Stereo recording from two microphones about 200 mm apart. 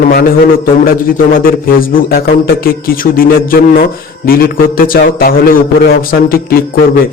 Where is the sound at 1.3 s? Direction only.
45° left (ahead or behind).